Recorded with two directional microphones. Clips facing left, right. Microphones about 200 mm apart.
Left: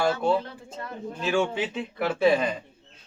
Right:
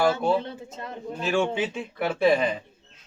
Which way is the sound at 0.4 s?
20° right (ahead or behind).